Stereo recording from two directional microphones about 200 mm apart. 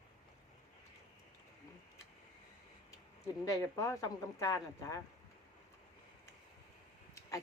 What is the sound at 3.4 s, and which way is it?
Speech, 15° left (ahead or behind).